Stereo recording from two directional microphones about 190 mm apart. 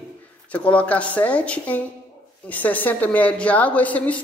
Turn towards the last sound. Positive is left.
turn(degrees=5)  # may be behind; listen again after turning